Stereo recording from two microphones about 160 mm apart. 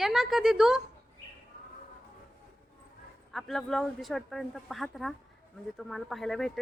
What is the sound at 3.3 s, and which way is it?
Speech, centre (ahead or behind).